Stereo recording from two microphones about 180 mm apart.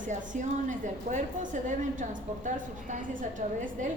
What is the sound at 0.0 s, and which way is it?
A woman's voice, 45° right (ahead or behind).